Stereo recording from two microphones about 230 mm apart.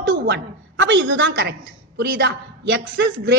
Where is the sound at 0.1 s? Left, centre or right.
Right.